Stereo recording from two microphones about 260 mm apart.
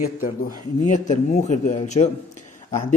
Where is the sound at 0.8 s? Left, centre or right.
Left.